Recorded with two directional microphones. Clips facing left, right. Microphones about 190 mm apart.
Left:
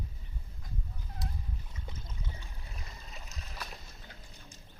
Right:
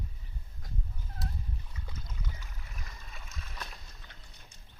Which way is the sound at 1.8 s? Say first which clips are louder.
Even; 25° left (ahead or behind).